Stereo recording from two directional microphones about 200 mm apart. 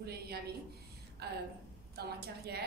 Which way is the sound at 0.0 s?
50° right (ahead or behind).